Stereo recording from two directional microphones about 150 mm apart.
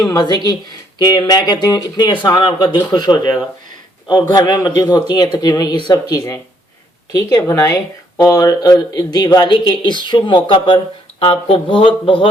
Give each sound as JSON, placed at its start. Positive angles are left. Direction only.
{"t": 0.0, "sound": "speech", "side_deg": 25}